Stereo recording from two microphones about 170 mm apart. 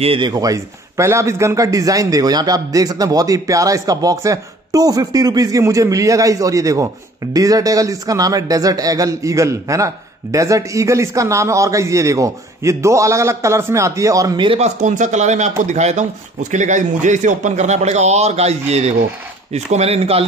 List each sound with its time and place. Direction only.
0.0 s speech: 30° right (ahead or behind)
14.6 s speech: 45° right (ahead or behind)